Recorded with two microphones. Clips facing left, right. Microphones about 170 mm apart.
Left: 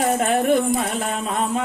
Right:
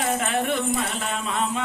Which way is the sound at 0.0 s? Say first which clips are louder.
Left 5 dB; 40° left (ahead or behind).